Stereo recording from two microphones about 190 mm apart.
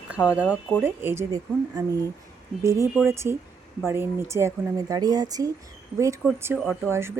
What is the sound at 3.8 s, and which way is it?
Speech, 15° right (ahead or behind).